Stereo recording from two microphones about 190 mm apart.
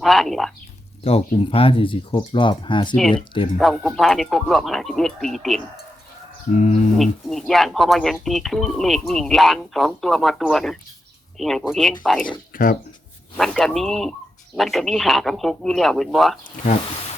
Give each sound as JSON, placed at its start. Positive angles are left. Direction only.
{"t": 0.0, "sound": "speech", "side_deg": 0}
{"t": 1.0, "sound": "speech", "side_deg": 30}
{"t": 2.9, "sound": "speech", "side_deg": 5}
{"t": 6.5, "sound": "speech", "side_deg": 35}
{"t": 6.9, "sound": "speech", "side_deg": 0}
{"t": 12.5, "sound": "speech", "side_deg": 45}
{"t": 13.3, "sound": "speech", "side_deg": 0}